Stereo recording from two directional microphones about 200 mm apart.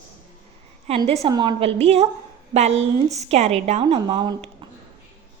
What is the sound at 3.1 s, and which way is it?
A woman's voice, 35° right (ahead or behind).